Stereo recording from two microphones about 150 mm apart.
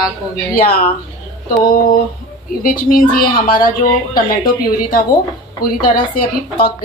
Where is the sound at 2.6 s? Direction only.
70° left (ahead or behind).